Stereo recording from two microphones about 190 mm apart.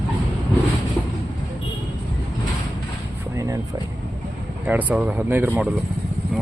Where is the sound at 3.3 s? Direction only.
15° right (ahead or behind).